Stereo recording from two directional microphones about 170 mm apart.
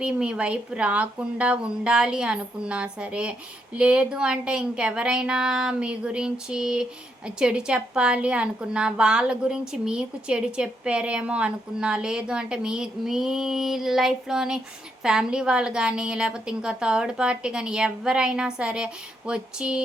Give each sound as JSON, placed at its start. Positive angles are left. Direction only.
{"t": 0.0, "sound": "a woman's voice", "side_deg": -5}